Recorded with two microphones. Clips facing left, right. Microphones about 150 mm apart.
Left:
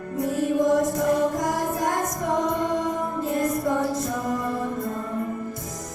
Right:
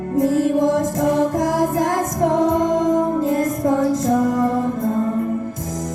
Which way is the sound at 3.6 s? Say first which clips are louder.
Right 7 dB; 90° right.